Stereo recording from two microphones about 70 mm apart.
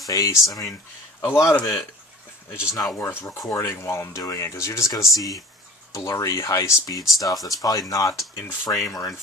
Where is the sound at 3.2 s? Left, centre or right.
Left.